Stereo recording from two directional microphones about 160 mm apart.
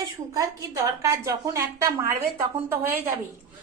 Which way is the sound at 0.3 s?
20° right (ahead or behind).